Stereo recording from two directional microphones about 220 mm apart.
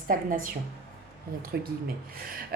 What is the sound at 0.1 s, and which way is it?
Speech, 40° right (ahead or behind).